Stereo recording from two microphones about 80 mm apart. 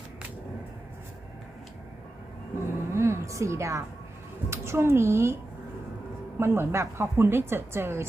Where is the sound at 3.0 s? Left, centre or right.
Right.